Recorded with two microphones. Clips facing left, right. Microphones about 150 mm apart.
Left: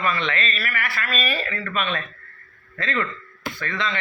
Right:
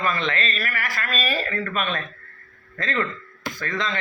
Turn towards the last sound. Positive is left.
turn(degrees=-40)  # may be behind; listen again after turning